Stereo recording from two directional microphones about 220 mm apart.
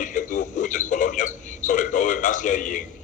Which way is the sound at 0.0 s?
35° left (ahead or behind).